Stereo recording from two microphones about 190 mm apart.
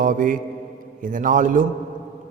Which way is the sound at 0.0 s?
45° right (ahead or behind).